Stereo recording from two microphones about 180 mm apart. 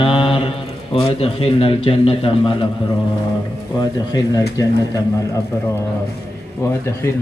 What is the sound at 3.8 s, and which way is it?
Speech, 20° left (ahead or behind).